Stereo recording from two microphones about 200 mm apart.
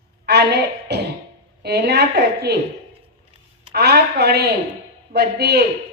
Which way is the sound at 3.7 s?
55° right (ahead or behind).